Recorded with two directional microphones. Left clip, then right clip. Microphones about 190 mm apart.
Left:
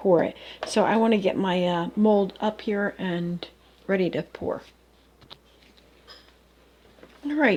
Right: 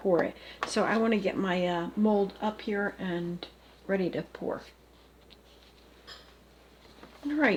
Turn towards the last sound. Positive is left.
turn(degrees=40)  # may be behind; listen again after turning